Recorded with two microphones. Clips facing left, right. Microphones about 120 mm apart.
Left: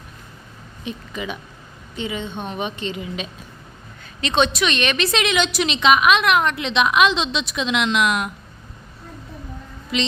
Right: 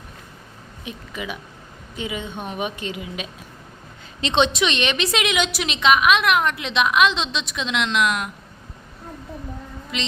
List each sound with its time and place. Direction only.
0.9 s a woman's voice: 5° right (ahead or behind)
4.2 s a woman's voice: 20° right (ahead or behind); by 8.3 s 5° left (ahead or behind)
9.9 s a woman's voice: centre (ahead or behind)